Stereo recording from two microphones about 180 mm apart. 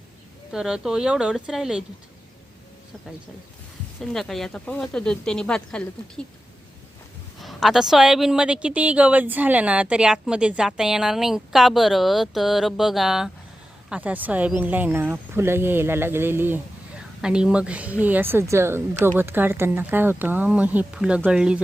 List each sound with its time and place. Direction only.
0.5 s speech: 5° right (ahead or behind)
4.0 s speech: centre (ahead or behind)
7.4 s speech: centre (ahead or behind)